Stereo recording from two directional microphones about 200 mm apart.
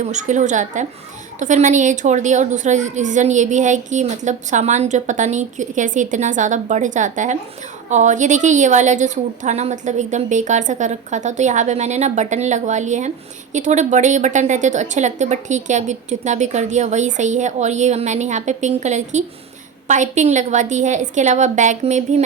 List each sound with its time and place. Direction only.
0.0 s a woman's voice: 35° right (ahead or behind)